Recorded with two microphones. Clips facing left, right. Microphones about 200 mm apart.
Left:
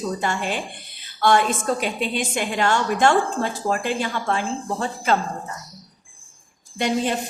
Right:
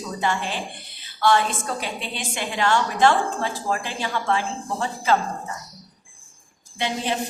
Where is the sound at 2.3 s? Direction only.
50° left (ahead or behind).